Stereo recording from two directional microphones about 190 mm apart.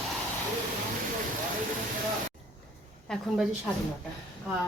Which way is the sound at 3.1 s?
Centre (ahead or behind).